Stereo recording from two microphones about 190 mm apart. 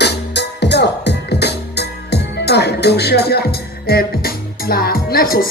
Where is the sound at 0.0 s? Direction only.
60° left (ahead or behind).